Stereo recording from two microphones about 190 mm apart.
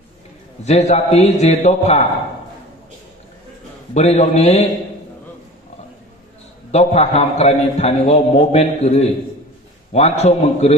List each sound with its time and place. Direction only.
0.6 s a man's voice: 35° left (ahead or behind)
3.9 s a man's voice: 35° left (ahead or behind)
6.7 s a man's voice: 35° left (ahead or behind)